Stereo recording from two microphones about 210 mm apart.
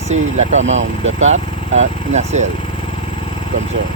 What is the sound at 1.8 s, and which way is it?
Speech, 35° right (ahead or behind).